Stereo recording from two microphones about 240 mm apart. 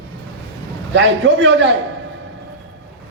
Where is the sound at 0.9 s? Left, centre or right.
Right.